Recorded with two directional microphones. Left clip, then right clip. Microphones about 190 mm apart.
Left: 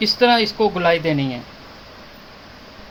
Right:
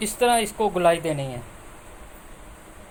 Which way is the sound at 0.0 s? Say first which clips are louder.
Left 6 dB; 25° right (ahead or behind).